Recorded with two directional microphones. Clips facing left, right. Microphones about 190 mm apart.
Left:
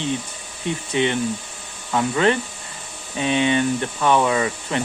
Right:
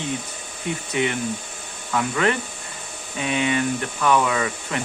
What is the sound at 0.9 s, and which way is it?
Speech, 25° left (ahead or behind).